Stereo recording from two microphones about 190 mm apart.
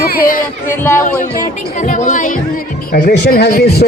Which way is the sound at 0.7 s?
10° left (ahead or behind).